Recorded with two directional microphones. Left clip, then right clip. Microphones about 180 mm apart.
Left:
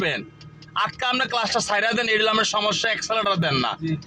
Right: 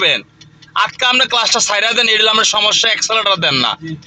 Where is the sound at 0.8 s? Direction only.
20° right (ahead or behind).